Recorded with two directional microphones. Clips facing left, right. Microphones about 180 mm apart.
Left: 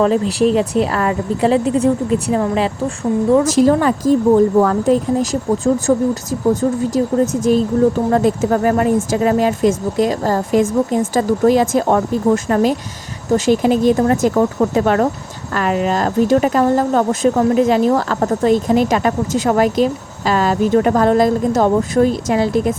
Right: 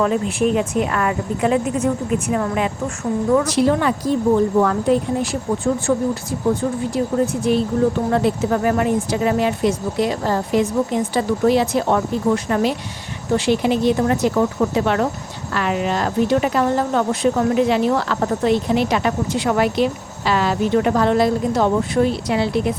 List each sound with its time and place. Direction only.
0.0 s speech: 30° left (ahead or behind)
3.4 s speech: 45° left (ahead or behind)